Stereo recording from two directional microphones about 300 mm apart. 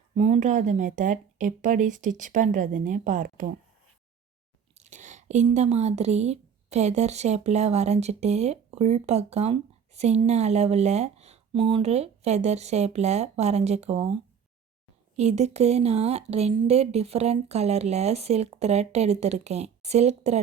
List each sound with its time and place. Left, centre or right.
0.2 s speech: right
4.7 s speech: right
15.1 s speech: right